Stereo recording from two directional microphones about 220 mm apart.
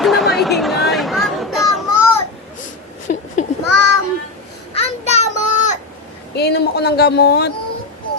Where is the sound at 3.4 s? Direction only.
35° left (ahead or behind).